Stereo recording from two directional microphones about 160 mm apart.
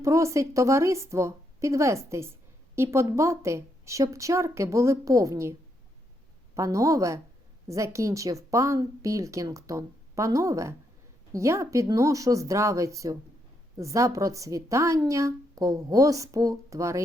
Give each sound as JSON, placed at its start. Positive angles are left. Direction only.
{"t": 0.0, "sound": "a woman's voice", "side_deg": -20}